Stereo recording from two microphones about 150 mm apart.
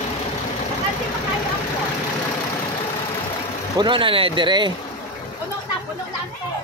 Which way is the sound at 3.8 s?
35° right (ahead or behind).